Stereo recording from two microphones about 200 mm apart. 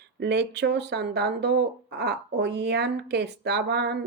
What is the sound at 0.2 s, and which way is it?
Speech, 55° right (ahead or behind).